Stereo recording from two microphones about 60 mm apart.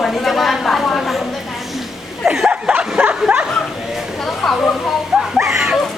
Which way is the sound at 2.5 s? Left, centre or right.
Centre.